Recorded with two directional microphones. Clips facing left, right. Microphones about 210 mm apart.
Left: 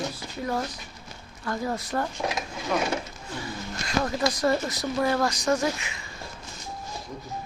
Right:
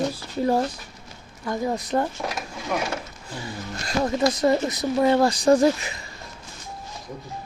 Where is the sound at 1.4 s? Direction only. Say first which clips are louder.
Right 4 dB; 15° right (ahead or behind).